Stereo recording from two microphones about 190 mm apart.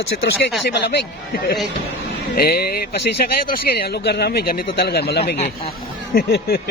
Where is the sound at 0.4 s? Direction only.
60° left (ahead or behind).